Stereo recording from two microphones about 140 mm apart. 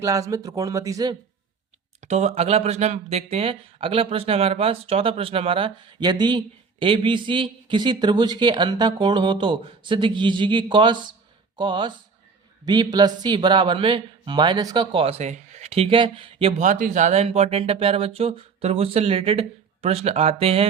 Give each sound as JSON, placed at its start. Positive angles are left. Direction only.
{"t": 0.0, "sound": "speech", "side_deg": -25}
{"t": 2.0, "sound": "speech", "side_deg": -55}
{"t": 14.9, "sound": "speech", "side_deg": -45}
{"t": 16.6, "sound": "speech", "side_deg": -70}